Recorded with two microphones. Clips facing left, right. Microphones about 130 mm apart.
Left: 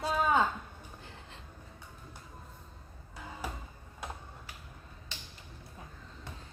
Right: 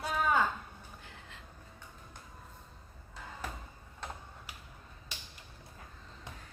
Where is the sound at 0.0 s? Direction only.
20° left (ahead or behind).